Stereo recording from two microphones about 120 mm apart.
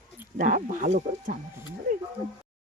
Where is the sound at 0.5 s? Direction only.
90° right.